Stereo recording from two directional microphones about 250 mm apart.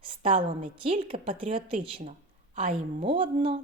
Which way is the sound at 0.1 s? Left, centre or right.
Right.